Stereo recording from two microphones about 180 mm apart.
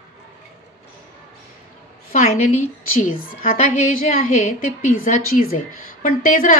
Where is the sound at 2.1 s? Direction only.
45° left (ahead or behind).